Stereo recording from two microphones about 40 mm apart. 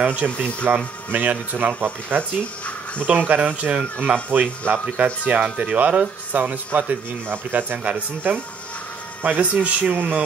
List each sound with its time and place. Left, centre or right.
0.0 s speech: right
1.8 s speech: right
3.1 s speech: right
9.2 s speech: right